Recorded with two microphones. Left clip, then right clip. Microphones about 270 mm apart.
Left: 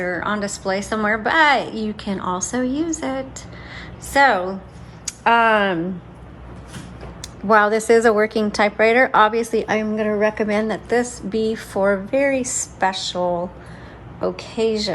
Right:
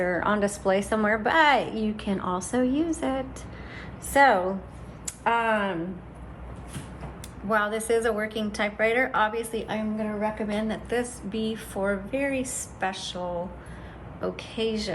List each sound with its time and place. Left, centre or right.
0.0 s a woman's voice: centre; by 5.7 s left
7.2 s a woman's voice: centre
14.2 s a woman's voice: centre